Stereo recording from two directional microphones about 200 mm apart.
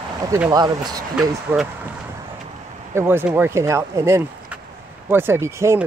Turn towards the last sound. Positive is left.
turn(degrees=-15)  # may be behind; listen again after turning